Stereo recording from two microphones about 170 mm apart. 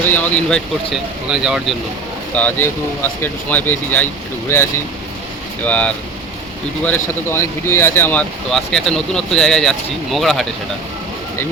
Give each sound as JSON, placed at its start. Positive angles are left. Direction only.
{"t": 0.1, "sound": "speech", "side_deg": 10}
{"t": 2.3, "sound": "speech", "side_deg": 10}
{"t": 8.4, "sound": "speech", "side_deg": 5}